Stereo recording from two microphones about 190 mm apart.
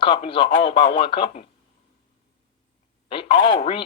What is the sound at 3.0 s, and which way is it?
Speech, 25° left (ahead or behind).